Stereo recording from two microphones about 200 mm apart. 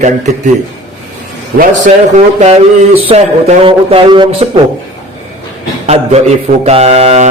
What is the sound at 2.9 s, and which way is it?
Speech, 30° right (ahead or behind).